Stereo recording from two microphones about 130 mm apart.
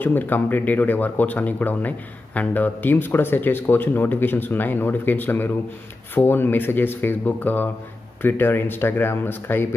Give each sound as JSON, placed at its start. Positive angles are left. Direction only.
{"t": 0.0, "sound": "speech", "side_deg": 15}